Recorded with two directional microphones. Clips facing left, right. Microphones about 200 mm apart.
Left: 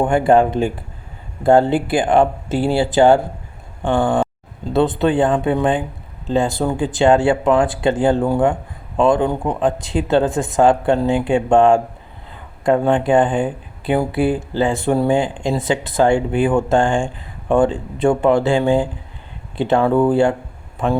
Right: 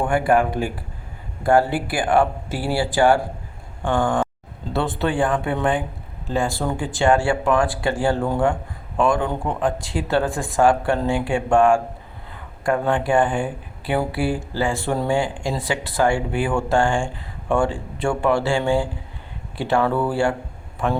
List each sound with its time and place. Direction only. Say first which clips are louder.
0.0 s speech: left 5 dB; 25° left (ahead or behind)